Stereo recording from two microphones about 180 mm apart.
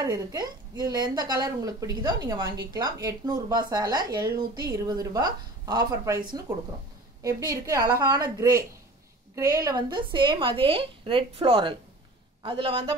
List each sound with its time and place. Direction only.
0.0 s speech: 20° right (ahead or behind)